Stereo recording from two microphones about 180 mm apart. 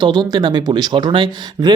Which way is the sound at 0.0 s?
25° right (ahead or behind).